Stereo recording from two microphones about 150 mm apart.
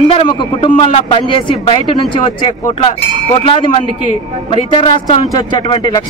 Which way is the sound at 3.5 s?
40° left (ahead or behind).